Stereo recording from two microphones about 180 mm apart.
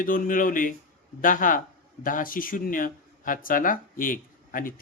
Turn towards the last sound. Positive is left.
turn(degrees=50)  # may be behind; listen again after turning